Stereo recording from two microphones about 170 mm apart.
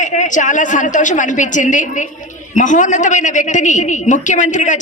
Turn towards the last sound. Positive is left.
turn(degrees=45)  # may be behind; listen again after turning